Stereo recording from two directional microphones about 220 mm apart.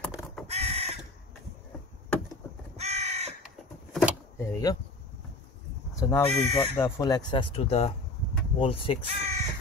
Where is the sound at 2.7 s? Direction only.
30° right (ahead or behind).